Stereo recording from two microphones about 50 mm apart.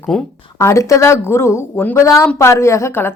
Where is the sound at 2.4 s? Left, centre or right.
Left.